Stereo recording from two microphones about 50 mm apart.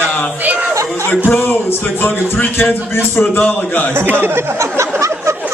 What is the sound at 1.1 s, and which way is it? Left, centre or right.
A man's voice, left.